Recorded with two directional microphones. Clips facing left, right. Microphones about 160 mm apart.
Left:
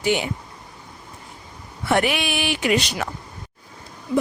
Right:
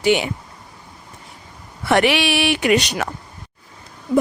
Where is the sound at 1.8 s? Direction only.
80° right.